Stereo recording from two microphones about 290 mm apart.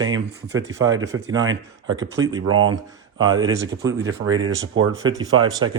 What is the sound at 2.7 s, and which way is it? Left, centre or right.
Speech, centre.